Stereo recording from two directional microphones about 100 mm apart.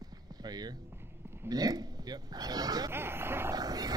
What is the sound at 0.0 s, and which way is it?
Clip-clop, 40° right (ahead or behind).